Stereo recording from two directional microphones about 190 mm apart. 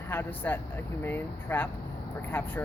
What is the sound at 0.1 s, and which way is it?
Speech, 10° left (ahead or behind).